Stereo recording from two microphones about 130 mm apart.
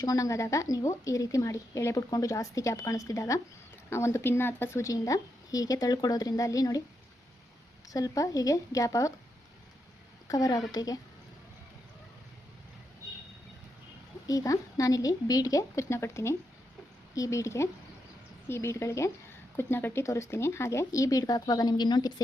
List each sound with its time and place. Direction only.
0.0 s a woman's voice: 25° left (ahead or behind)
7.9 s a woman's voice: 25° left (ahead or behind)
10.2 s a woman's voice: 30° left (ahead or behind)
14.3 s a woman's voice: 25° left (ahead or behind)